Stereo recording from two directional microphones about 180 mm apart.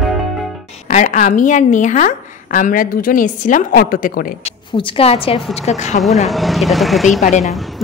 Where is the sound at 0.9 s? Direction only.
40° left (ahead or behind).